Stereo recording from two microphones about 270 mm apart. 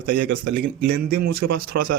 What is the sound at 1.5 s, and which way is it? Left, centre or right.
Speech, right.